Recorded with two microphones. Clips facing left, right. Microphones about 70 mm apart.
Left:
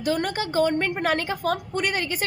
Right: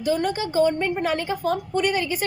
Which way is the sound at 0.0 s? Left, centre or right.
Left.